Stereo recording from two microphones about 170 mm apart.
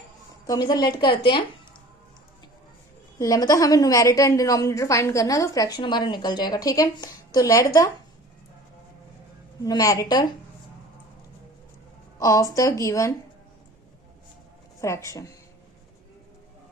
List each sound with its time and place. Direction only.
0.4 s a woman's voice: 20° left (ahead or behind)
3.2 s a woman's voice: 20° left (ahead or behind)
9.6 s a woman's voice: 20° left (ahead or behind)
12.2 s a woman's voice: 20° left (ahead or behind)
14.8 s speech: 15° left (ahead or behind)